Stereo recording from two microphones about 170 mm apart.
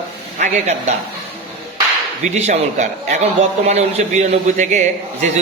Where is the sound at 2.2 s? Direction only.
40° right (ahead or behind).